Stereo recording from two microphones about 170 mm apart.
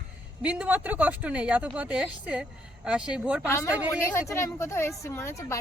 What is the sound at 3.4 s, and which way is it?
Speech, 15° left (ahead or behind).